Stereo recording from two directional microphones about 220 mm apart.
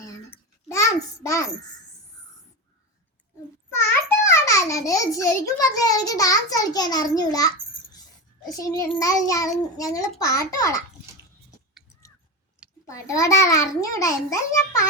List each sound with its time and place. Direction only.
0.0 s a sound: 15° left (ahead or behind)
3.8 s a child's voice: 10° left (ahead or behind)
12.9 s a child's voice: 15° left (ahead or behind)